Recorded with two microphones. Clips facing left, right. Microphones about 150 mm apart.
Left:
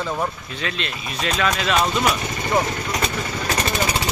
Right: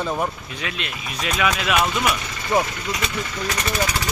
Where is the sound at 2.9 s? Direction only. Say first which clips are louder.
Left 2 dB; 40° left (ahead or behind).